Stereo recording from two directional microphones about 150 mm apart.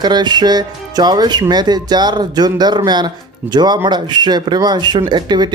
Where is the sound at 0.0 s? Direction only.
30° right (ahead or behind).